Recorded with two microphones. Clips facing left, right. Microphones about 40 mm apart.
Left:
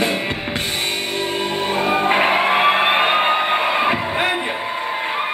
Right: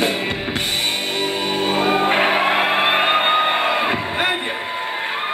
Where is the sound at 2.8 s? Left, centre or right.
Centre.